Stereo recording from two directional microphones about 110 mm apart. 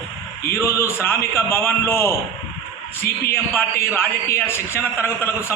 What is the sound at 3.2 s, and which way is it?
A man's voice, 20° left (ahead or behind).